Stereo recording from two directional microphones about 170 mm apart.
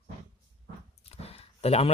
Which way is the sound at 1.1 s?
35° left (ahead or behind).